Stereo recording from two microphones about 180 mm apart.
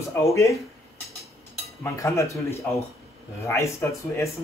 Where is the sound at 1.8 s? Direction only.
15° left (ahead or behind).